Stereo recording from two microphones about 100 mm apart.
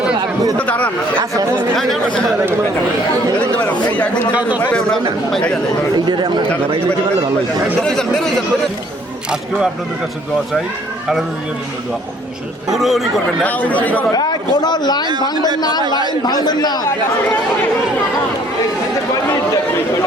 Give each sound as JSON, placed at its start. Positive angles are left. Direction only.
{"t": 0.6, "sound": "chatter", "side_deg": 15}
{"t": 1.7, "sound": "speech", "side_deg": 0}
{"t": 4.6, "sound": "speech", "side_deg": 10}
{"t": 7.8, "sound": "speech", "side_deg": 5}
{"t": 12.7, "sound": "speech", "side_deg": 0}
{"t": 13.4, "sound": "speech", "side_deg": 15}
{"t": 14.1, "sound": "a man's voice", "side_deg": 45}
{"t": 16.2, "sound": "a man's voice", "side_deg": 45}